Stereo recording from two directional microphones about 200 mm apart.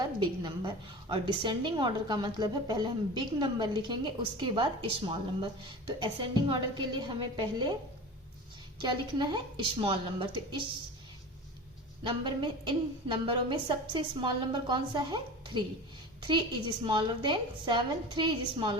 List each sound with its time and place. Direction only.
0.0 s a woman's voice: 20° right (ahead or behind)
8.8 s a woman's voice: 20° right (ahead or behind)
12.0 s a woman's voice: 25° right (ahead or behind)
16.8 s a woman's voice: 25° right (ahead or behind)